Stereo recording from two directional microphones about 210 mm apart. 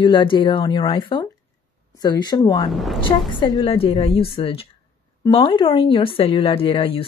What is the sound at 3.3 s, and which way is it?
Speech, 20° left (ahead or behind).